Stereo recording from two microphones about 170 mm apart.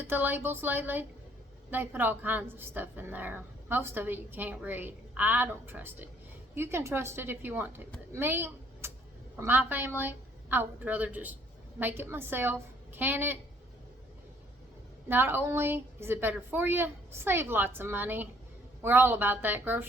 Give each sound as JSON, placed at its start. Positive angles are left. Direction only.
{"t": 0.0, "sound": "a woman's voice", "side_deg": -10}
{"t": 15.1, "sound": "a woman's voice", "side_deg": -10}